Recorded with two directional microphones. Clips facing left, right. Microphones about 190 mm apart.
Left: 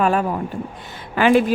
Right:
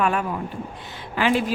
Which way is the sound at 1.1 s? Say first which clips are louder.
Left 6 dB; 55° left (ahead or behind).